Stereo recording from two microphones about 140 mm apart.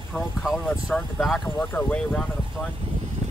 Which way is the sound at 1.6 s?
15° left (ahead or behind).